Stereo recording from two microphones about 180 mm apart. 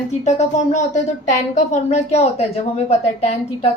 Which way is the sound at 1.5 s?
40° left (ahead or behind).